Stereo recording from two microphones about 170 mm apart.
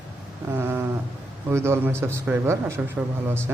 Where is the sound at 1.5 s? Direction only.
15° right (ahead or behind).